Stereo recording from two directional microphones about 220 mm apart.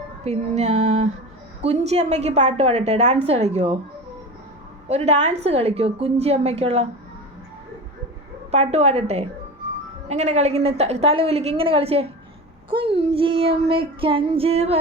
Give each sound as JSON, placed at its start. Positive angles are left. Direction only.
{"t": 0.3, "sound": "female singing", "side_deg": -30}
{"t": 1.6, "sound": "a woman's voice", "side_deg": -30}
{"t": 4.9, "sound": "a woman's voice", "side_deg": -30}
{"t": 8.4, "sound": "a woman's voice", "side_deg": -30}